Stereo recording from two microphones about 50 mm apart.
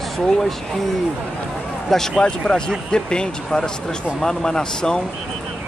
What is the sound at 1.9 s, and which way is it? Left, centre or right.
Speech, centre.